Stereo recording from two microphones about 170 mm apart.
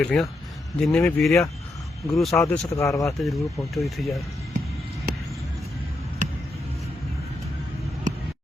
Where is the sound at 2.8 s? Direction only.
15° left (ahead or behind).